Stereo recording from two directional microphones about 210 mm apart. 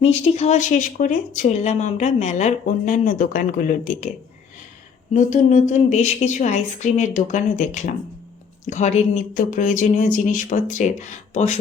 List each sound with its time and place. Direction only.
0.0 s speech: 30° left (ahead or behind)
5.1 s speech: 35° left (ahead or behind)